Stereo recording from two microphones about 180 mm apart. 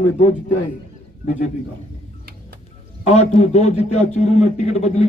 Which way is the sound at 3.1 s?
35° left (ahead or behind).